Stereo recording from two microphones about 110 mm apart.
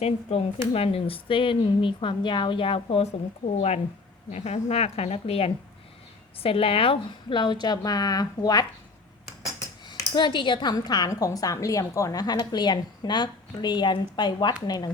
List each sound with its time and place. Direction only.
0.3 s a woman's voice: 70° left (ahead or behind)
4.3 s a woman's voice: 90° left; by 8.6 s 35° left (ahead or behind)
9.8 s a woman's voice: 45° left (ahead or behind)